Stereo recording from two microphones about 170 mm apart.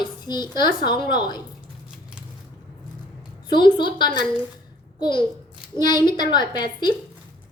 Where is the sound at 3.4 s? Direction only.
25° left (ahead or behind).